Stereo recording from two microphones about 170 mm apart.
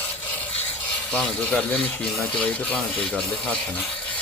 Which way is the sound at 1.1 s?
5° left (ahead or behind).